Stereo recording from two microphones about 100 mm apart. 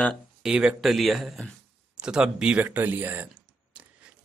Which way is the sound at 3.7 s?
15° right (ahead or behind).